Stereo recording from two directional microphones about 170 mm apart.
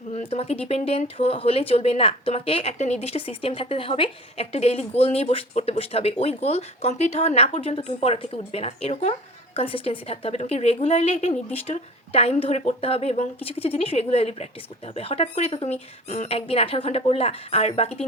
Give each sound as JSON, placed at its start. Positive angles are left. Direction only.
{"t": 0.1, "sound": "speech", "side_deg": 40}